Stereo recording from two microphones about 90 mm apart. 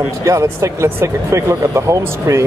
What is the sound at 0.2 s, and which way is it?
Speech, 35° right (ahead or behind).